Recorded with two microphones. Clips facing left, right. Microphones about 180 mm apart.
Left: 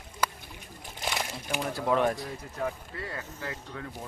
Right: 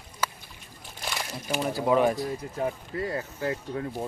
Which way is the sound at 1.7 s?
5° right (ahead or behind).